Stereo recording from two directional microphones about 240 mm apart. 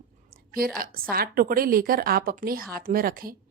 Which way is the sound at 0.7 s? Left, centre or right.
Right.